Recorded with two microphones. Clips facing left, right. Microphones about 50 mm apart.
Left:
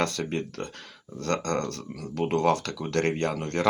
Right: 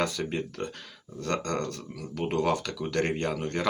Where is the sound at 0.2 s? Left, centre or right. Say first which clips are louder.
Left 1 dB; centre.